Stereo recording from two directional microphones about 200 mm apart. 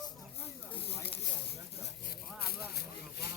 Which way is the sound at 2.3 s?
50° left (ahead or behind).